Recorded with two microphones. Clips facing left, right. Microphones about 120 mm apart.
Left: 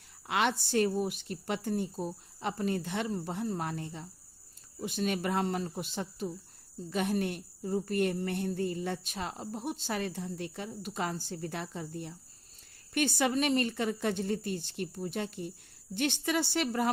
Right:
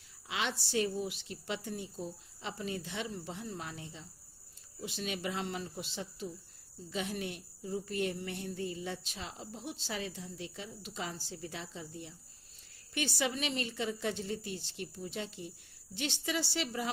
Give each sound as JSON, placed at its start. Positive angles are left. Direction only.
{"t": 0.3, "sound": "a woman's voice", "side_deg": 55}